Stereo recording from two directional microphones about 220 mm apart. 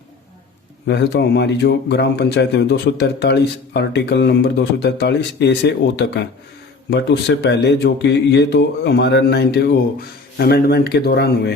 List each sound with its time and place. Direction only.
0.9 s speech: 50° left (ahead or behind)